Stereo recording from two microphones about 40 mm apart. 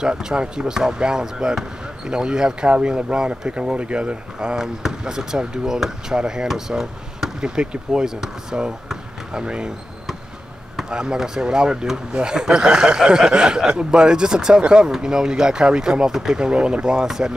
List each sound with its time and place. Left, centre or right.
0.0 s a man's voice: centre
4.6 s a man's voice: centre
10.9 s a man's voice: centre